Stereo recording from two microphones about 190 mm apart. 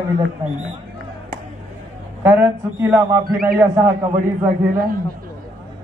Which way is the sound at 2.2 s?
10° right (ahead or behind).